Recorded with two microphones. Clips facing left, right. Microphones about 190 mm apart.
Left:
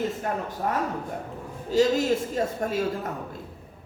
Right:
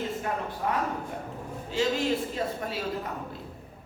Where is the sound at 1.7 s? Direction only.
40° left (ahead or behind).